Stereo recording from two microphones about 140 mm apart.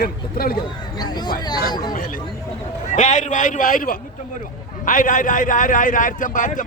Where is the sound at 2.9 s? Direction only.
60° left (ahead or behind).